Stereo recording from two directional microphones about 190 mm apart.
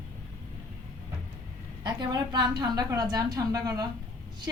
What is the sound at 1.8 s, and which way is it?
Speech, 20° right (ahead or behind).